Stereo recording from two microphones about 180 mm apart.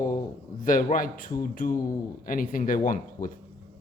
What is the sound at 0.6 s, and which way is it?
Speech, 50° left (ahead or behind).